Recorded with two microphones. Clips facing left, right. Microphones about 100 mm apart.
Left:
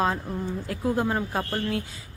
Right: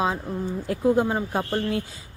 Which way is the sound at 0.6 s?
25° right (ahead or behind).